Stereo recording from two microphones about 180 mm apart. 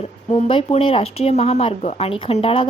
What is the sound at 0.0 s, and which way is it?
Speech, 35° left (ahead or behind).